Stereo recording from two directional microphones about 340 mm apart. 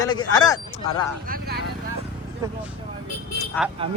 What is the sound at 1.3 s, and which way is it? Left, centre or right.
Speech, right.